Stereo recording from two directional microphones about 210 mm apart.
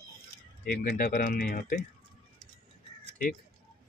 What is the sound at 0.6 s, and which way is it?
Speech, 45° left (ahead or behind).